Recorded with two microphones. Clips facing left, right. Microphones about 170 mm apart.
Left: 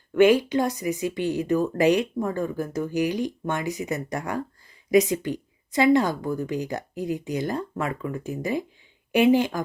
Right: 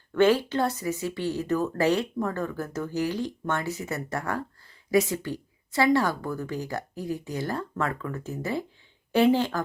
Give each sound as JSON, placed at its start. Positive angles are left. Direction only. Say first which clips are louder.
{"t": 0.1, "sound": "speech", "louder": "left 4 dB", "side_deg": 15}